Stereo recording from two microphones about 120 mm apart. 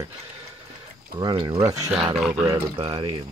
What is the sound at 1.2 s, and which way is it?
Speech, 45° right (ahead or behind).